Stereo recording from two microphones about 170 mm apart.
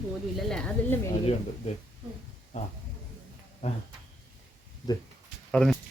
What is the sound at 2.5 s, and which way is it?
Speech, 45° left (ahead or behind).